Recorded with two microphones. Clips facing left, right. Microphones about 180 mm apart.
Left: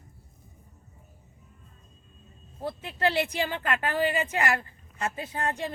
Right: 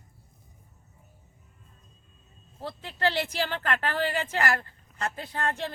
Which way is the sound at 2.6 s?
15° left (ahead or behind).